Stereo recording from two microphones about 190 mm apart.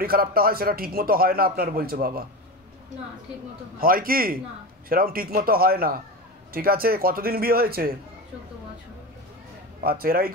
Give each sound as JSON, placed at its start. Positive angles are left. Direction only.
{"t": 0.0, "sound": "a man's voice", "side_deg": -50}
{"t": 3.8, "sound": "a man's voice", "side_deg": -50}
{"t": 9.8, "sound": "a man's voice", "side_deg": -50}